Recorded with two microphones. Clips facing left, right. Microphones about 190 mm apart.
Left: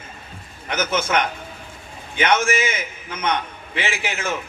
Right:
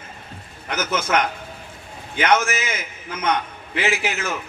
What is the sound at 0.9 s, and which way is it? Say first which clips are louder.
Speech: right 1 dB; 50° left (ahead or behind).